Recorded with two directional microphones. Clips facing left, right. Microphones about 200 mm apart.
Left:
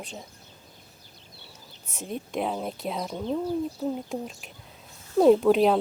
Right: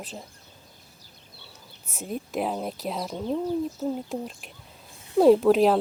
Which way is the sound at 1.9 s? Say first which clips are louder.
Right 1 dB; 5° right (ahead or behind).